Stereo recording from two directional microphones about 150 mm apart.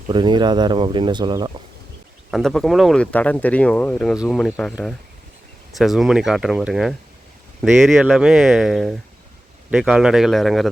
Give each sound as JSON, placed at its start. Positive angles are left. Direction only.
{"t": 0.1, "sound": "speech", "side_deg": -30}
{"t": 2.3, "sound": "speech", "side_deg": 0}
{"t": 5.7, "sound": "speech", "side_deg": 0}